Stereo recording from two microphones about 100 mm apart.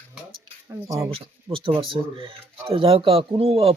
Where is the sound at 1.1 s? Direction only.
60° right (ahead or behind).